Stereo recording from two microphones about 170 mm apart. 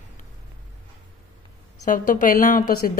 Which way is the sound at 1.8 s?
50° left (ahead or behind).